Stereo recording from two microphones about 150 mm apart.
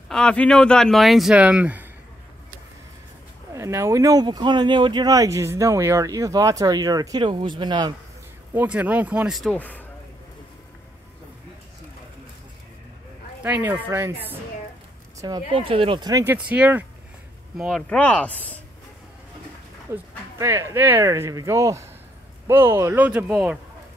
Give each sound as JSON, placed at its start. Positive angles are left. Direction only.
{"t": 0.1, "sound": "speech", "side_deg": 5}
{"t": 3.5, "sound": "speech", "side_deg": -20}
{"t": 8.5, "sound": "speech", "side_deg": -10}
{"t": 9.5, "sound": "speech", "side_deg": 10}
{"t": 13.4, "sound": "speech", "side_deg": -10}
{"t": 15.1, "sound": "speech", "side_deg": -25}
{"t": 16.3, "sound": "speech", "side_deg": -10}
{"t": 17.6, "sound": "speech", "side_deg": 5}
{"t": 19.9, "sound": "speech", "side_deg": -15}